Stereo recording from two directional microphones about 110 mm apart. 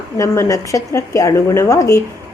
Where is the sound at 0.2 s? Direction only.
30° left (ahead or behind).